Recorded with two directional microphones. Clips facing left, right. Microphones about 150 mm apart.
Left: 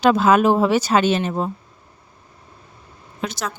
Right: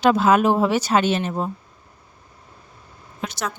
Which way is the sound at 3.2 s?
90° left.